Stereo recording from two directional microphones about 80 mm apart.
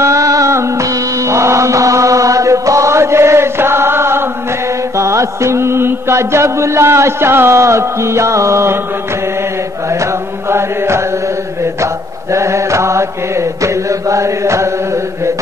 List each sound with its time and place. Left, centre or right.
0.0 s music: right
4.9 s mantra: right
11.8 s mantra: right